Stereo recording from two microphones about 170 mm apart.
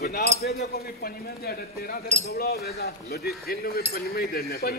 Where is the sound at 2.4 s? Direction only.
70° left (ahead or behind).